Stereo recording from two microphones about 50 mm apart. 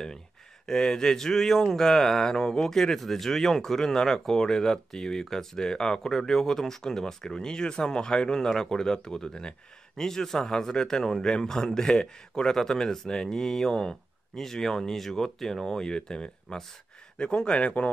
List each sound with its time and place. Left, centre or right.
0.7 s speech: centre